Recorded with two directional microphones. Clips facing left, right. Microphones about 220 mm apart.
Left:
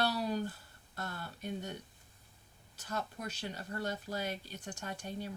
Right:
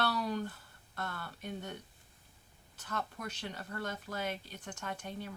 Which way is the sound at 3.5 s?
35° left (ahead or behind).